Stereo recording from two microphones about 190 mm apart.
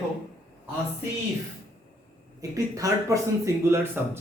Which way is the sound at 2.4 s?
15° right (ahead or behind).